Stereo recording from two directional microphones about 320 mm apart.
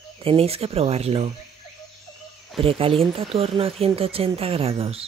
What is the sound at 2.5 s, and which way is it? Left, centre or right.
Speech, centre.